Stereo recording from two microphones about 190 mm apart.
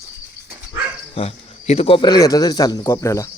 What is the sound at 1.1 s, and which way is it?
Speech, 30° left (ahead or behind).